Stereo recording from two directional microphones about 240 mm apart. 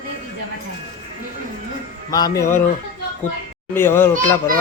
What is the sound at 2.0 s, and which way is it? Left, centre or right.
Music, centre.